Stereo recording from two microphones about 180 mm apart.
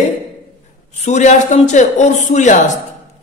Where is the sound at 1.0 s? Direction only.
40° left (ahead or behind).